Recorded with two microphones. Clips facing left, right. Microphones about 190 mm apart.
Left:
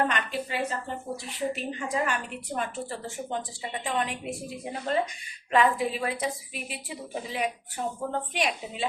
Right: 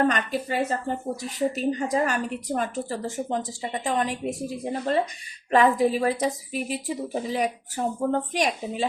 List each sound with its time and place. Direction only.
0.1 s a woman's voice: 45° right (ahead or behind)